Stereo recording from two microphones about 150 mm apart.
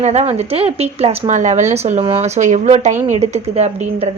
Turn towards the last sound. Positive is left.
turn(degrees=-45)  # may be behind; listen again after turning